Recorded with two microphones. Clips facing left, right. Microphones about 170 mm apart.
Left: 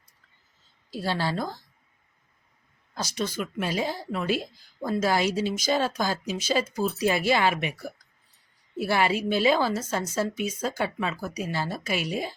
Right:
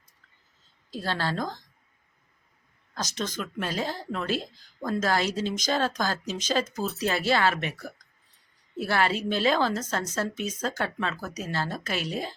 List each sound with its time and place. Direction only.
0.9 s speech: 10° left (ahead or behind)
2.9 s speech: 10° left (ahead or behind)